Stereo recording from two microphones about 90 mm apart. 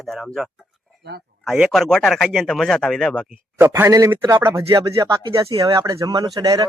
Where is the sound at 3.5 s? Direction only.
25° right (ahead or behind).